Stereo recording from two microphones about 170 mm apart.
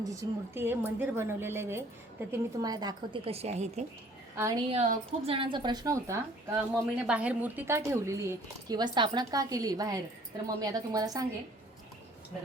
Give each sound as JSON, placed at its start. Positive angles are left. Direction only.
{"t": 0.0, "sound": "a woman's voice", "side_deg": -20}
{"t": 4.4, "sound": "a woman's voice", "side_deg": -20}
{"t": 4.7, "sound": "a woman's voice", "side_deg": -40}